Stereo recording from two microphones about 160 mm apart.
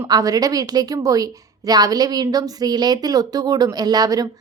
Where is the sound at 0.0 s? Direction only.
20° right (ahead or behind).